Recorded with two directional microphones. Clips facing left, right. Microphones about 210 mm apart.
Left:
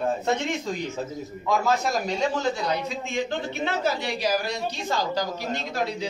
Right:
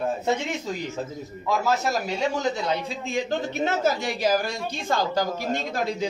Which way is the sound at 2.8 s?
35° right (ahead or behind).